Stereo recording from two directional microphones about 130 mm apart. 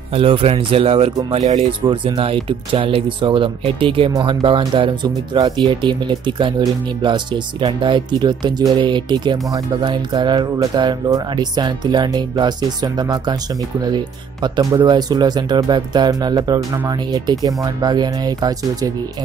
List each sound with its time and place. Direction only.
0.1 s speech: 45° right (ahead or behind)